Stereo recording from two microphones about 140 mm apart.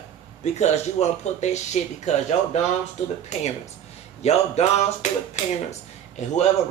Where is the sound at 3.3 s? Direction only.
55° left (ahead or behind).